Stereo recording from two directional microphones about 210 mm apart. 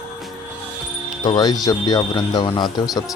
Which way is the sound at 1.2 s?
20° left (ahead or behind).